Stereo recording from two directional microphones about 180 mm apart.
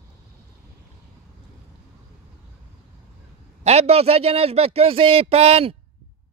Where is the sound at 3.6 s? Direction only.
35° right (ahead or behind).